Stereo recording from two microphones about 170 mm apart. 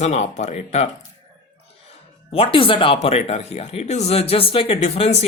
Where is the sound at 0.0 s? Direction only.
40° left (ahead or behind).